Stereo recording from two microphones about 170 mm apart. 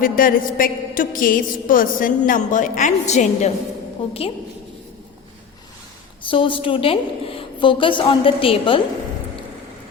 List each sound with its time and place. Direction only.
0.0 s a woman's voice: 55° left (ahead or behind)
4.0 s a woman's voice: 30° left (ahead or behind)
6.2 s a woman's voice: 30° left (ahead or behind)